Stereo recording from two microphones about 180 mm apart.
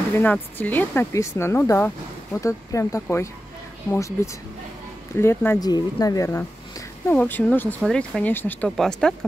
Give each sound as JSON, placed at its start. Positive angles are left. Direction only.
{"t": 0.1, "sound": "speech", "side_deg": 10}
{"t": 5.1, "sound": "speech", "side_deg": 15}